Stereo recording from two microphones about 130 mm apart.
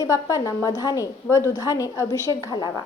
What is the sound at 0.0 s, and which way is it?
A woman's voice, 25° left (ahead or behind).